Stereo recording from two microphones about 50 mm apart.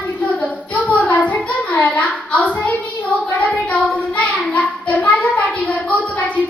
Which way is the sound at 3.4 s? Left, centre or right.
Left.